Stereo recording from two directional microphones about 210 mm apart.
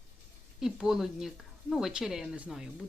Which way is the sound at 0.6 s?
Centre (ahead or behind).